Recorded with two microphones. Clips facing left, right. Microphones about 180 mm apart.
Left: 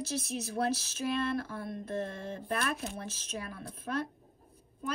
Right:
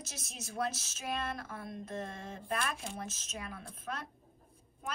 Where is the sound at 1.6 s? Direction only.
50° left (ahead or behind).